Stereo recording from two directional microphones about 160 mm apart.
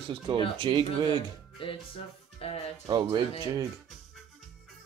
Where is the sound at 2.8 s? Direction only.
25° right (ahead or behind).